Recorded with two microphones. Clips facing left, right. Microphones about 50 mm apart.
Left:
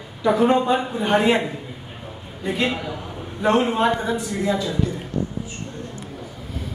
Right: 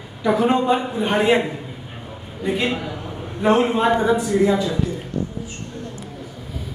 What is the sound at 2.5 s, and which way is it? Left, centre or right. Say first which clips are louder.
A man's voice: right 1 dB; centre.